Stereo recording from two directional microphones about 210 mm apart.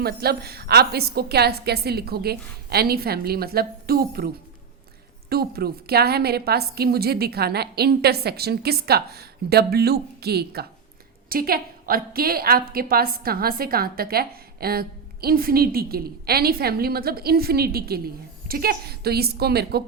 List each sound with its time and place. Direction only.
0.0 s a woman's voice: 50° right (ahead or behind)
5.3 s a woman's voice: 45° right (ahead or behind)